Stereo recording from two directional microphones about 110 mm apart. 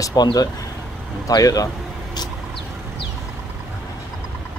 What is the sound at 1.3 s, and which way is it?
Speech, 35° left (ahead or behind).